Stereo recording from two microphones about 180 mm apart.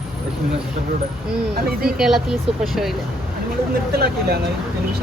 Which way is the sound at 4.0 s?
60° right (ahead or behind).